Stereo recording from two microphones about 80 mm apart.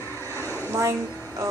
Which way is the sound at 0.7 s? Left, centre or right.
Right.